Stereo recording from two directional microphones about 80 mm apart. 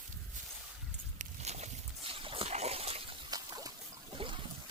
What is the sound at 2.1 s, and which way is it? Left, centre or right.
Dog, right.